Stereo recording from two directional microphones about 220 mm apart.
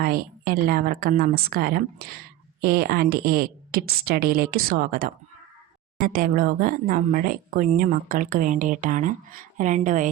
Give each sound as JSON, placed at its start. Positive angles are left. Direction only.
{"t": 0.0, "sound": "a woman's voice", "side_deg": -40}